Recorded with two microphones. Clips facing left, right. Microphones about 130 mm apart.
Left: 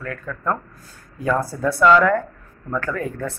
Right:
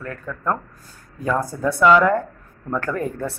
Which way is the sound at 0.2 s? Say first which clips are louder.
Right 1 dB; 5° right (ahead or behind).